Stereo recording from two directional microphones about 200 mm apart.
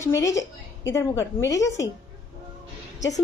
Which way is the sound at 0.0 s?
15° left (ahead or behind).